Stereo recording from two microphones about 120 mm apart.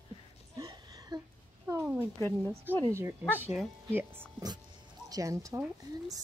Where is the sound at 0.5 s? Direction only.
30° right (ahead or behind).